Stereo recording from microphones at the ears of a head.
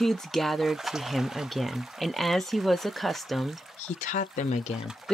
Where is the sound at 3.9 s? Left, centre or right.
Left.